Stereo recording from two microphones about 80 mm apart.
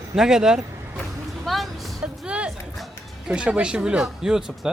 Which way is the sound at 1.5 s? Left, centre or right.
Centre.